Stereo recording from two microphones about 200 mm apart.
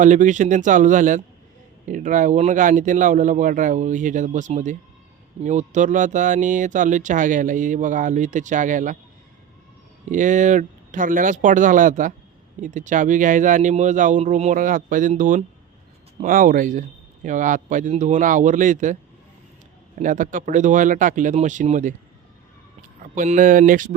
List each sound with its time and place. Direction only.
0.0 s speech: 40° right (ahead or behind)
10.1 s speech: 40° right (ahead or behind)
20.0 s speech: 40° right (ahead or behind)
23.1 s speech: 40° right (ahead or behind)